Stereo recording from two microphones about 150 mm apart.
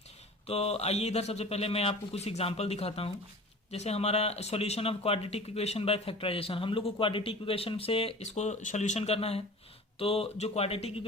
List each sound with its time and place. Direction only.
0.4 s a man's voice: 40° left (ahead or behind)